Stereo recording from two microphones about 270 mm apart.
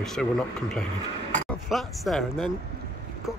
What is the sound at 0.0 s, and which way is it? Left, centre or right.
Speech, centre.